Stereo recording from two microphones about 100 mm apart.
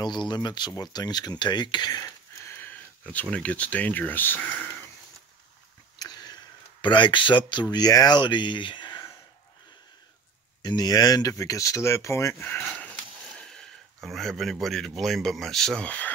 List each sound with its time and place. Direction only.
0.0 s speech: 45° left (ahead or behind)
2.0 s speech: 25° left (ahead or behind)
5.9 s clicking: 45° left (ahead or behind)
7.7 s speech: 40° left (ahead or behind)
10.6 s speech: 45° left (ahead or behind)
12.4 s speech: 15° left (ahead or behind)